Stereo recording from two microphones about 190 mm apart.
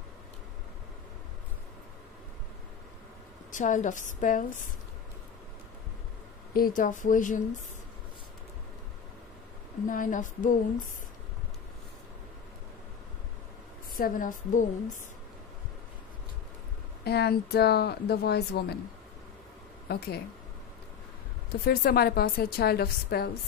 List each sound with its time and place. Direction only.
3.5 s a woman's voice: 40° left (ahead or behind)
6.5 s speech: 45° left (ahead or behind)
9.8 s speech: 45° left (ahead or behind)
13.9 s speech: 45° left (ahead or behind)
17.0 s a woman's voice: 60° left (ahead or behind)
19.9 s a woman's voice: 55° left (ahead or behind)
21.5 s a woman's voice: 55° left (ahead or behind)